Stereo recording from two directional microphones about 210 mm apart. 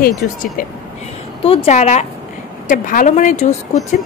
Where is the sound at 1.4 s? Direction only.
25° left (ahead or behind).